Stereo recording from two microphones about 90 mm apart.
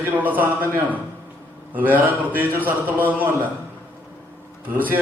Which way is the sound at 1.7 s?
20° right (ahead or behind).